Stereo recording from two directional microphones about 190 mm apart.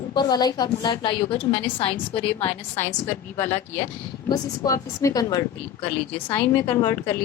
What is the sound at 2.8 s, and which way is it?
A woman's voice, 10° left (ahead or behind).